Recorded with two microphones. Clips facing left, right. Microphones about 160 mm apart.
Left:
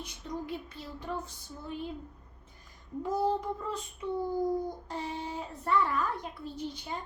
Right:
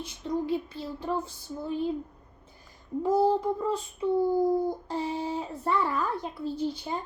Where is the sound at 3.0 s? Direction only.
30° right (ahead or behind).